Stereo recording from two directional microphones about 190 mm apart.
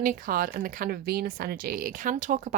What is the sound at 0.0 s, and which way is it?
A woman's voice, 45° right (ahead or behind).